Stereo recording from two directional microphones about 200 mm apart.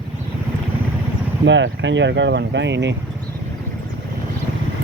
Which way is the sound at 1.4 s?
65° right (ahead or behind).